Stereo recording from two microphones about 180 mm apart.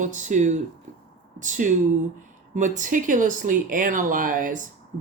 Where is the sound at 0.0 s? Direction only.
45° right (ahead or behind).